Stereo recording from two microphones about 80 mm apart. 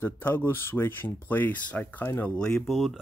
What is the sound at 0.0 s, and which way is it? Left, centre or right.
Speech, left.